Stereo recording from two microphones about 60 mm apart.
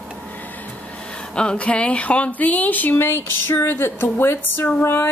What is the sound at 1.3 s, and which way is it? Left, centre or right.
Speech, centre.